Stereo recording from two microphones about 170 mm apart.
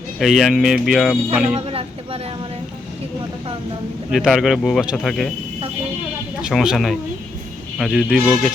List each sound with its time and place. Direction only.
0.2 s speech: centre (ahead or behind)
1.5 s a sound: 35° right (ahead or behind)
4.1 s speech: centre (ahead or behind)
6.4 s speech: 5° right (ahead or behind)